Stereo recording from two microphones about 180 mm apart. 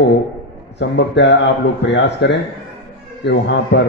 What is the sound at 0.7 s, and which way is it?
A man's voice, 75° left (ahead or behind).